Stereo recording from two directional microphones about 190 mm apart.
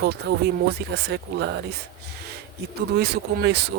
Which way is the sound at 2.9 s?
60° right (ahead or behind).